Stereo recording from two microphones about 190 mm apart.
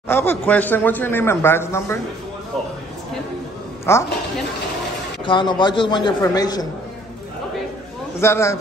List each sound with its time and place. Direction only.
0.1 s speech: 10° left (ahead or behind)
3.9 s speech: 15° left (ahead or behind)
5.2 s a man's voice: 25° left (ahead or behind)
8.2 s speech: 15° left (ahead or behind)